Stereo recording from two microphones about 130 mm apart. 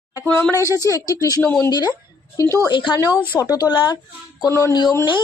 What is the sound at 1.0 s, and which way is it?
Speech, 25° left (ahead or behind).